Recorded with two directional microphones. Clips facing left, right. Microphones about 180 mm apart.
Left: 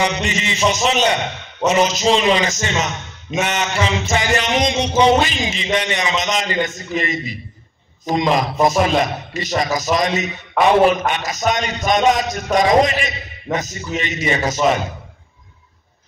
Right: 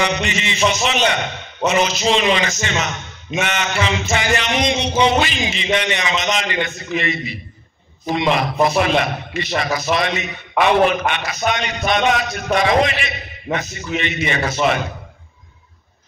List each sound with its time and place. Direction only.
0.0 s a man's voice: 40° left (ahead or behind)
10.6 s a man's voice: centre (ahead or behind)
11.1 s a man's voice: 40° left (ahead or behind)